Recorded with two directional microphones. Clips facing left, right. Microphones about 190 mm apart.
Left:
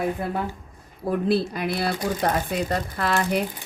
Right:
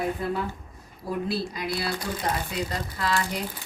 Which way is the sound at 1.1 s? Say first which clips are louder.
Left 6 dB; 55° left (ahead or behind).